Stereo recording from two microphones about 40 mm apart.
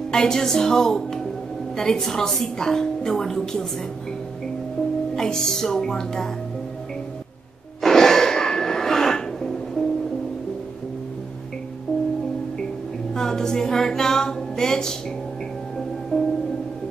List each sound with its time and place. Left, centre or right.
0.1 s a woman's voice: centre
5.1 s a woman's voice: centre
7.8 s a sound: centre
11.9 s music: centre
13.1 s a sound: centre
16.1 s music: centre